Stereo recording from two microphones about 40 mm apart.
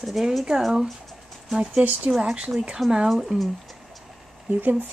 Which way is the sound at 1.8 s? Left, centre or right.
Right.